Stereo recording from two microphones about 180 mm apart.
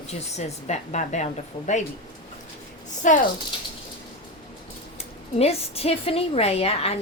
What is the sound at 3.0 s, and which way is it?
Speech, 45° left (ahead or behind).